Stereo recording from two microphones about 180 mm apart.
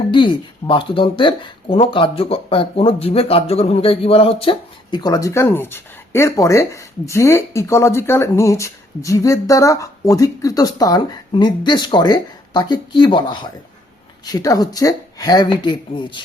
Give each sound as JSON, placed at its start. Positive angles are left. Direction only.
{"t": 0.1, "sound": "speech", "side_deg": 25}